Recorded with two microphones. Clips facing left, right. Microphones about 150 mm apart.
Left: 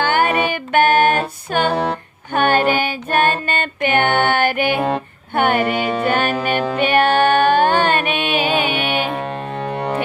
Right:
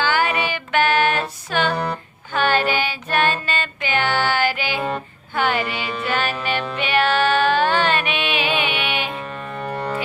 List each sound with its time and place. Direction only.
0.0 s music: 55° left (ahead or behind)